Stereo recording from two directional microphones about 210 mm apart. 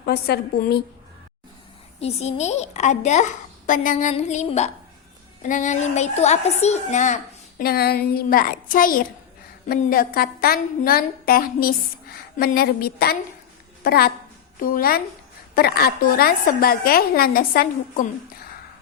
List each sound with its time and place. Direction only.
0.0 s a woman's voice: 50° left (ahead or behind)
2.0 s a woman's voice: 30° left (ahead or behind)
7.6 s a woman's voice: 45° left (ahead or behind)